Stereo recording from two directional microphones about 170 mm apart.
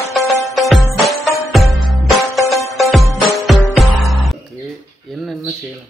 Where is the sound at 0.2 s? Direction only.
20° right (ahead or behind).